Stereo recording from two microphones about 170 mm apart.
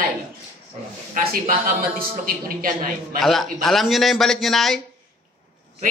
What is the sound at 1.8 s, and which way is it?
Speech, 60° right (ahead or behind).